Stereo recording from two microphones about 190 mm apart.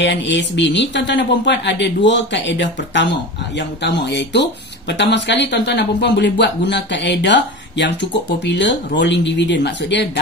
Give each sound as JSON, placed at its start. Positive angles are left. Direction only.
{"t": 0.0, "sound": "speech", "side_deg": 65}